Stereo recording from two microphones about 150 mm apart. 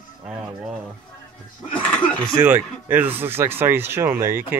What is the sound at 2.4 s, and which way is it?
Speech, 10° right (ahead or behind).